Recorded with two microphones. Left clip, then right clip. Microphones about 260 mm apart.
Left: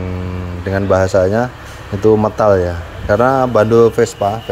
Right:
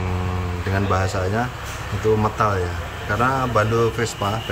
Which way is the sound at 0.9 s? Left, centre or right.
Centre.